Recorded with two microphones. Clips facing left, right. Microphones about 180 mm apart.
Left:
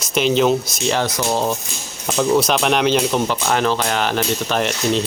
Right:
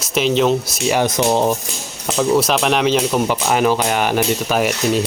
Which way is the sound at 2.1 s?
5° right (ahead or behind).